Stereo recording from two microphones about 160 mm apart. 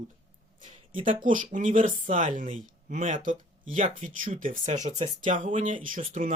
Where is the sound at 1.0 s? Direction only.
55° right (ahead or behind).